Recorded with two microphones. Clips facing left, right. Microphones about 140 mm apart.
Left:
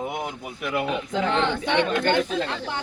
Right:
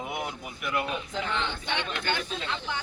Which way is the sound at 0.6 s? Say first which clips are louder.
Left 5 dB; 60° left (ahead or behind).